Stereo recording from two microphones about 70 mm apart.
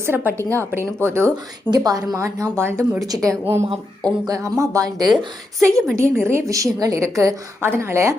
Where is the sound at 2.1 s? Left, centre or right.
Right.